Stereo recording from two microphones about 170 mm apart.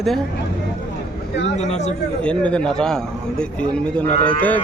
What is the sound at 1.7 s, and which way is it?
Speech, 40° left (ahead or behind).